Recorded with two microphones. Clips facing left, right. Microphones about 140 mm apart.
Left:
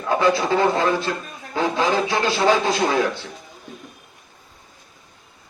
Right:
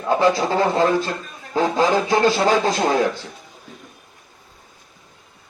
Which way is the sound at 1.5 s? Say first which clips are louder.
Right 2 dB; 40° right (ahead or behind).